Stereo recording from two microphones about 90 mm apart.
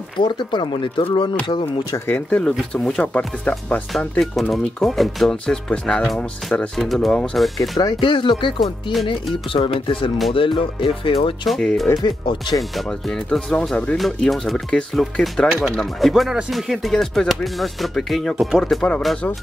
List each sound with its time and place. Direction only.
0.2 s speech: 60° left (ahead or behind)
2.0 s speech: 20° left (ahead or behind)
4.2 s speech: centre (ahead or behind)
6.8 s speech: centre (ahead or behind)
8.0 s speech: 65° left (ahead or behind)
11.4 s speech: centre (ahead or behind)
12.0 s speech: 55° left (ahead or behind)
13.3 s speech: 5° left (ahead or behind)
13.9 s speech: centre (ahead or behind)